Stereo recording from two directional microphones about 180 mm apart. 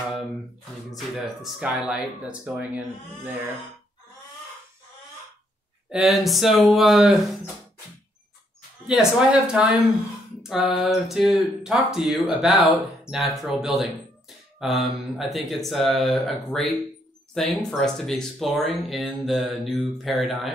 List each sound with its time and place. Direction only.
0.9 s speech: centre (ahead or behind)
5.9 s speech: centre (ahead or behind)
8.8 s speech: 5° right (ahead or behind)
17.6 s speech: centre (ahead or behind)